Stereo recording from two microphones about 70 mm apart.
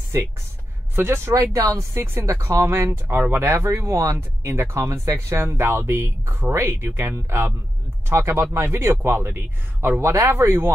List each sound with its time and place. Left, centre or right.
0.9 s speech: right
1.3 s speech: right